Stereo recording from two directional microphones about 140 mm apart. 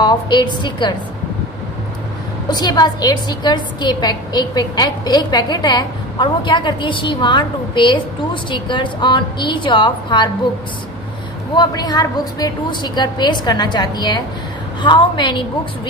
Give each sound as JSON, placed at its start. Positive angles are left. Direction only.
{"t": 0.0, "sound": "a woman's voice", "side_deg": 30}
{"t": 2.4, "sound": "a woman's voice", "side_deg": 30}
{"t": 11.5, "sound": "a woman's voice", "side_deg": 30}